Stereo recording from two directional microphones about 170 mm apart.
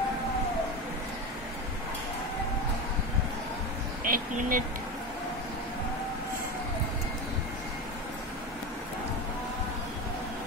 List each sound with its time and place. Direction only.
4.0 s speech: 55° right (ahead or behind)